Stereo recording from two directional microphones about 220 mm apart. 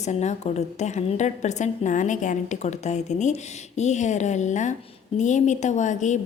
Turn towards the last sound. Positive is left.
turn(degrees=35)  # may be behind; listen again after turning